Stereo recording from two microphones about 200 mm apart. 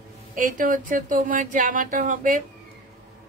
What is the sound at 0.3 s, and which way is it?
Speech, 40° right (ahead or behind).